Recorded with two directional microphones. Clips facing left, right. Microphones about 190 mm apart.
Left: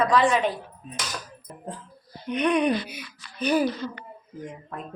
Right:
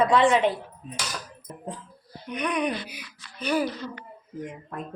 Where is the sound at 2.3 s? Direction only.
25° left (ahead or behind).